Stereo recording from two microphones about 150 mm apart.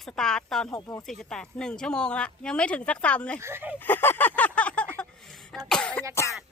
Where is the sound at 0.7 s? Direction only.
20° left (ahead or behind).